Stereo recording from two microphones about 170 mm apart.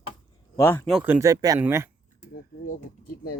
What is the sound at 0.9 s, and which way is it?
Speech, 5° right (ahead or behind).